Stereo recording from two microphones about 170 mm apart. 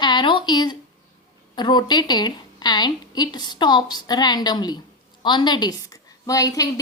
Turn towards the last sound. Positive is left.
turn(degrees=20)  # may be behind; listen again after turning